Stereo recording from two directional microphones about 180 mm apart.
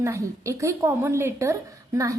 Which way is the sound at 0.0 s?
15° right (ahead or behind).